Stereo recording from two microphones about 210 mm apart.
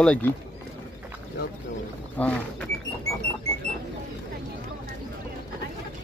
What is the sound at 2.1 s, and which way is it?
Speech, 5° left (ahead or behind).